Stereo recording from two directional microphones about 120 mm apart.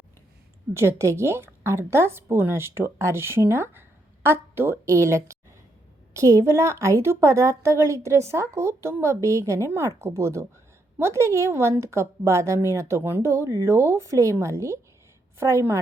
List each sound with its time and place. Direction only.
0.7 s a woman's voice: 20° right (ahead or behind)